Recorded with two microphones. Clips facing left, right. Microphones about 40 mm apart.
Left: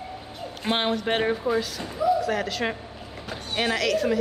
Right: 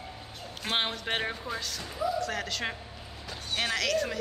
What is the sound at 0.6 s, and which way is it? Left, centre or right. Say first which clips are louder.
Speech: left 6 dB; centre.